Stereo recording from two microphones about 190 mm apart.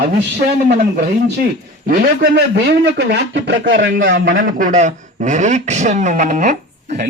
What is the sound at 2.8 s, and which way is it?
Speech, 60° right (ahead or behind).